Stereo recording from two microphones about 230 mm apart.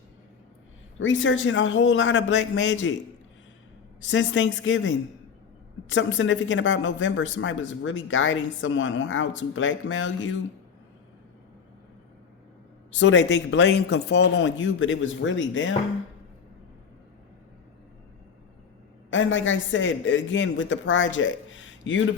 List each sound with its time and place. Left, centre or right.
0.9 s speech: left
4.0 s speech: left
13.0 s speech: left
19.1 s speech: left